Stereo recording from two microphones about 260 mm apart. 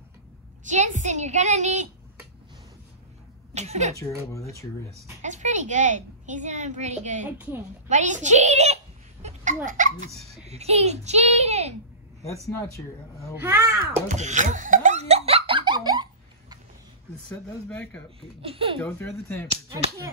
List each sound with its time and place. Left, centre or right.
0.7 s a woman's voice: right
3.5 s a woman's voice: right
4.3 s speech: centre
5.2 s a woman's voice: right
7.2 s speech: centre
7.9 s a woman's voice: right
9.2 s a sound: right
9.7 s a woman's voice: right
12.2 s speech: centre
13.4 s speech: centre
14.0 s laughter: right
17.6 s speech: centre
18.4 s a woman's voice: right
18.8 s speech: centre